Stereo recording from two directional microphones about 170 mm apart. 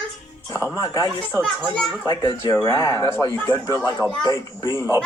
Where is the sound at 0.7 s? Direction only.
20° left (ahead or behind).